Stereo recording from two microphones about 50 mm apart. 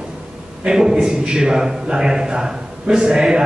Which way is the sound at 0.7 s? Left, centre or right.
Centre.